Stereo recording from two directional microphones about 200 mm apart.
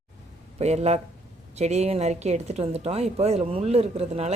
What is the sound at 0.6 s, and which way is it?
Speech, 35° right (ahead or behind).